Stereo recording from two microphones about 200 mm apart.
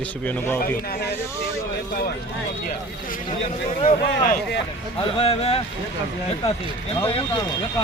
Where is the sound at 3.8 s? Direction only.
45° left (ahead or behind).